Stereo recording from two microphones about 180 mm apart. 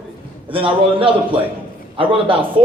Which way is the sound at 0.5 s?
30° right (ahead or behind).